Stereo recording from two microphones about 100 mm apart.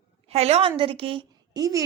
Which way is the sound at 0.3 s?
90° right.